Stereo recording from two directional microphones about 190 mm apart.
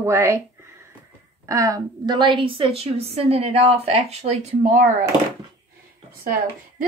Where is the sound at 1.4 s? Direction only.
15° right (ahead or behind); by 4.8 s 35° right (ahead or behind).